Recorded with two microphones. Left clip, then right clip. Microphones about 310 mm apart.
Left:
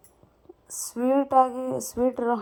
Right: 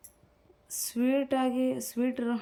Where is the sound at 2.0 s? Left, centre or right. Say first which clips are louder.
Left 9 dB; left.